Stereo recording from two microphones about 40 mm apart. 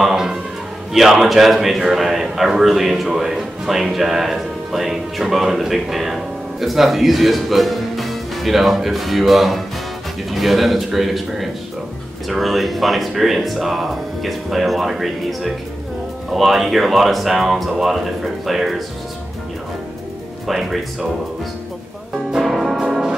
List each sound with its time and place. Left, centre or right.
0.0 s a sound: centre
0.9 s a man's voice: centre
20.4 s a man's voice: centre
22.4 s music: centre